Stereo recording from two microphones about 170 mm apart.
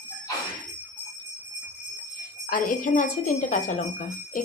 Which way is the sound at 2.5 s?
55° left (ahead or behind).